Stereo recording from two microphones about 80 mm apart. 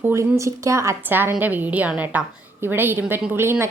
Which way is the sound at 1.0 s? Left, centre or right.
Right.